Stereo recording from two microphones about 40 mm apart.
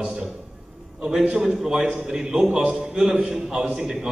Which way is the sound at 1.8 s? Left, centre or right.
Centre.